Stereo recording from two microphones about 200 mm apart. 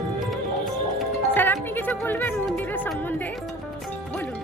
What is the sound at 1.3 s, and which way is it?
Speech, 10° left (ahead or behind).